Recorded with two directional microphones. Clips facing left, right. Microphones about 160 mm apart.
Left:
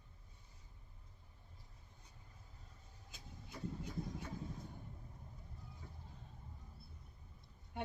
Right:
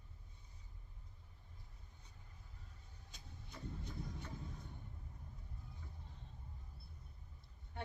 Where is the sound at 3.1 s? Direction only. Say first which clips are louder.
Left 3 dB; 5° left (ahead or behind).